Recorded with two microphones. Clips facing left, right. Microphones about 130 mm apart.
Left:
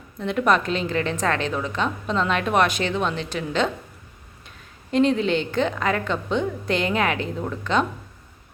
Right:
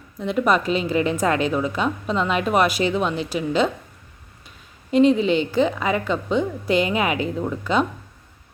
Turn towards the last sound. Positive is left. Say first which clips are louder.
# right 2 dB
turn(degrees=-5)  # may be behind; listen again after turning